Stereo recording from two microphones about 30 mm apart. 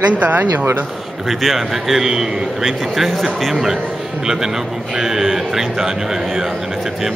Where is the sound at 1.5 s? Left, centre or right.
Centre.